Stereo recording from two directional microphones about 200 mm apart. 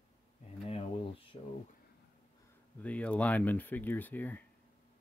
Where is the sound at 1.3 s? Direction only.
25° left (ahead or behind).